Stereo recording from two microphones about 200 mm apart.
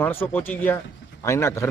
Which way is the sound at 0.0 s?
10° left (ahead or behind).